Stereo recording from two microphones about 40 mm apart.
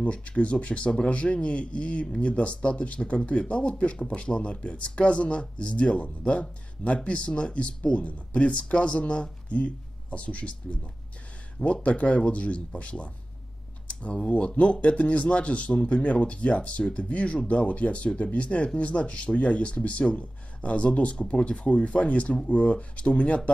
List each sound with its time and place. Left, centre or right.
0.0 s speech: left